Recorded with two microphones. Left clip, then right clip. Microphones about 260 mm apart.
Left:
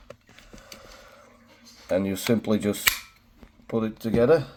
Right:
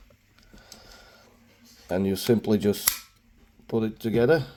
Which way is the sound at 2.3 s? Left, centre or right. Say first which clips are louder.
Right 2 dB; right.